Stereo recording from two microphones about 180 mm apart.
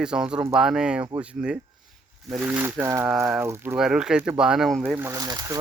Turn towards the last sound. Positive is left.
turn(degrees=-20)  # may be behind; listen again after turning